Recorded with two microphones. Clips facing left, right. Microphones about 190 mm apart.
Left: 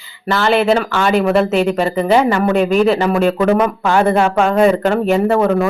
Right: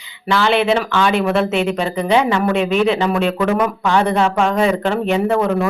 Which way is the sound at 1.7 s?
5° left (ahead or behind).